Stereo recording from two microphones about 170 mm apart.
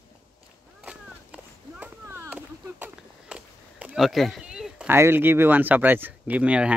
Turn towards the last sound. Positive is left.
turn(degrees=-5)  # may be behind; listen again after turning